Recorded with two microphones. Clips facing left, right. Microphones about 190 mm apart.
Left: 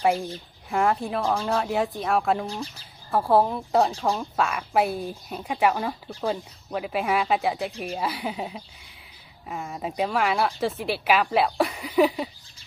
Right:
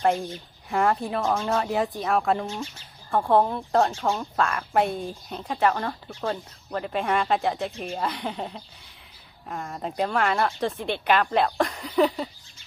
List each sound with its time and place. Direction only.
0.7 s speech: centre (ahead or behind)
2.5 s speech: 35° left (ahead or behind)
3.1 s speech: 5° left (ahead or behind)